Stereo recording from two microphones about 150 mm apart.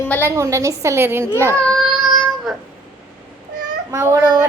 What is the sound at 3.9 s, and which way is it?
Speech, 25° right (ahead or behind).